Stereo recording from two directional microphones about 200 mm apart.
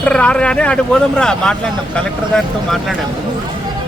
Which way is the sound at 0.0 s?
5° left (ahead or behind).